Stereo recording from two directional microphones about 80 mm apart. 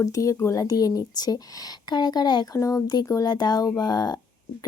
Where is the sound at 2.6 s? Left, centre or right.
Left.